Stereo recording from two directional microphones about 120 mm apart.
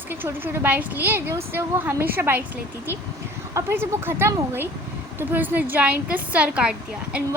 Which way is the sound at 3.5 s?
20° right (ahead or behind).